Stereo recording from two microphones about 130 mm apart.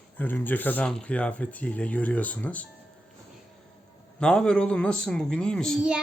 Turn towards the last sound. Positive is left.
turn(degrees=5)  # may be behind; listen again after turning